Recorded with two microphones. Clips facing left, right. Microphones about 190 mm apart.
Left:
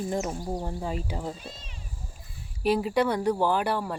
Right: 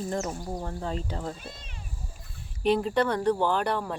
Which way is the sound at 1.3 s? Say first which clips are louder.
Even; 55° right (ahead or behind).